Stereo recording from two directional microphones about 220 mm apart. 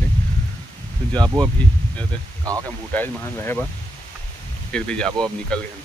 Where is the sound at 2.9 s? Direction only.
10° left (ahead or behind).